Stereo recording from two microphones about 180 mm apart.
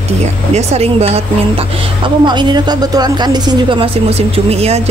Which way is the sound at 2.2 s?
25° right (ahead or behind).